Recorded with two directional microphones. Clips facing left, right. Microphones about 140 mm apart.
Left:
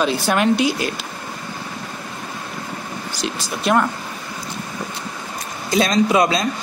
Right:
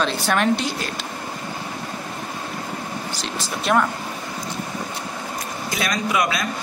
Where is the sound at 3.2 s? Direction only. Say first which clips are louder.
Left 3 dB; centre (ahead or behind).